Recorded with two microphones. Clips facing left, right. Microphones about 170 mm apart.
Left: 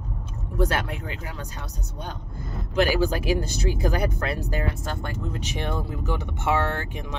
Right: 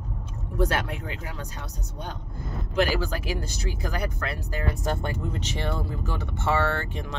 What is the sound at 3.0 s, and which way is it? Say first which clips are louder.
Speech: left 7 dB; 20° left (ahead or behind).